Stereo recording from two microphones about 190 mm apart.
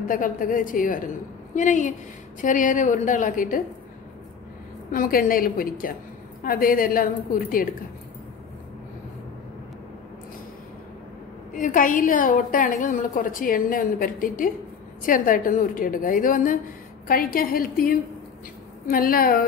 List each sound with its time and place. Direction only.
0.1 s a woman's voice: 45° left (ahead or behind)
4.9 s a woman's voice: 50° left (ahead or behind)
11.5 s a woman's voice: 45° left (ahead or behind)